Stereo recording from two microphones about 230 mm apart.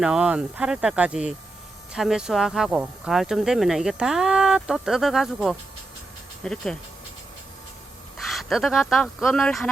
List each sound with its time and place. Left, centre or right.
0.0 s speech: centre
8.2 s speech: centre